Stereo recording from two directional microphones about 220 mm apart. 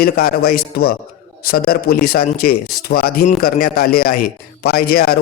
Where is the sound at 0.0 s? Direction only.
45° left (ahead or behind).